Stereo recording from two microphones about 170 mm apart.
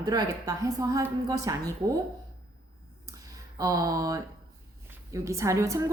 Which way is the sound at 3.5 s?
20° right (ahead or behind).